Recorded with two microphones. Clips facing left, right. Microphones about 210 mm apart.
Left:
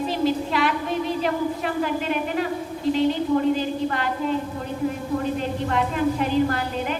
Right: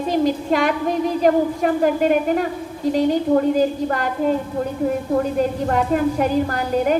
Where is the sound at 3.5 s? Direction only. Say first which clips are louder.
Right 5 dB; 45° right (ahead or behind).